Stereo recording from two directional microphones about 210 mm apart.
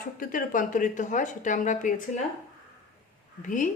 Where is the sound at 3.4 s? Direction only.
40° left (ahead or behind).